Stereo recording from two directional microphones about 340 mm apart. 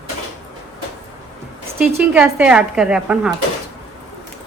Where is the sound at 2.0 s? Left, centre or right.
Centre.